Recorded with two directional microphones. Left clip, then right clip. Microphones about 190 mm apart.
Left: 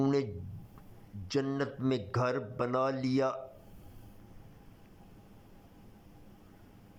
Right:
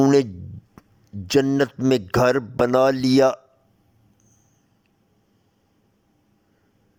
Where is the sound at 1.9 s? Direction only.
45° right (ahead or behind).